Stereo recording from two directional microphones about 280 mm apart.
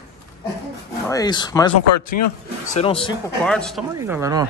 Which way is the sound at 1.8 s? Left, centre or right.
Left.